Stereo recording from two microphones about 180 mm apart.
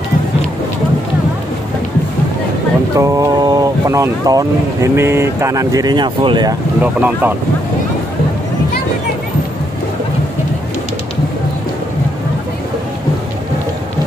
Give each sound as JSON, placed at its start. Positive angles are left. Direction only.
{"t": 3.0, "sound": "speech", "side_deg": -15}
{"t": 6.8, "sound": "speech", "side_deg": -10}